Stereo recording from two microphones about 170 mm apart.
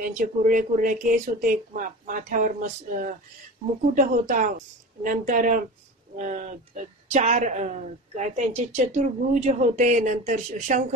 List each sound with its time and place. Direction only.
0.1 s a woman's voice: 50° right (ahead or behind)